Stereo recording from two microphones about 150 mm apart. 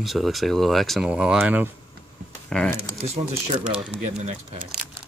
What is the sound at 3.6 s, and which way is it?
Speech, 5° right (ahead or behind).